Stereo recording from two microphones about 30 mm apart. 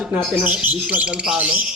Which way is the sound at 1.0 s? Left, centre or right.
Right.